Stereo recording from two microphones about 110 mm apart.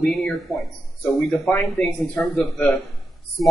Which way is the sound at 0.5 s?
30° left (ahead or behind).